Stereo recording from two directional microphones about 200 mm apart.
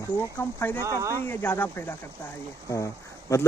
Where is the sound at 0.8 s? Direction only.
15° right (ahead or behind).